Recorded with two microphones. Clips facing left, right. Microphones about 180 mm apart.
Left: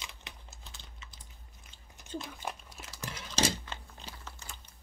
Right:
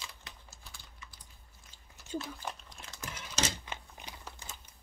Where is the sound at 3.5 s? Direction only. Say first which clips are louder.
Even; 15° right (ahead or behind).